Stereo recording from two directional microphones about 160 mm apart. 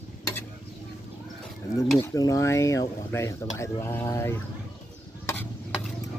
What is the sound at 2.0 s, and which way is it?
Speech, 20° left (ahead or behind).